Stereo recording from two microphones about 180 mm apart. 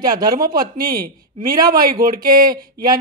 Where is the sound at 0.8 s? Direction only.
60° right (ahead or behind).